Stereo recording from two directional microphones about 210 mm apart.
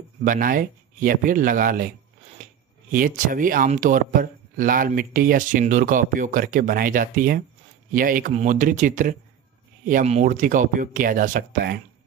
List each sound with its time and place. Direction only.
0.2 s speech: 40° right (ahead or behind)
2.9 s speech: 40° right (ahead or behind)